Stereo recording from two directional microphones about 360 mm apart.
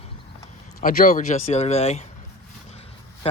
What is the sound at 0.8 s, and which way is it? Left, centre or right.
Speech, left.